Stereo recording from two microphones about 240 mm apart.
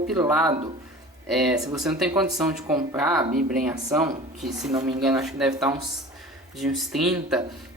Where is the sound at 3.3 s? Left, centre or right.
Right.